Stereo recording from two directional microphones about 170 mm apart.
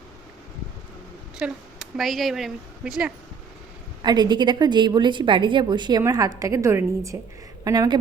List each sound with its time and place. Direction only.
1.4 s speech: 5° right (ahead or behind)
4.0 s a woman's voice: 25° right (ahead or behind)